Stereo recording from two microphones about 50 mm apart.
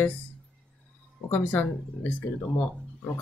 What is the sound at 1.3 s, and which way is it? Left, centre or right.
Speech, left.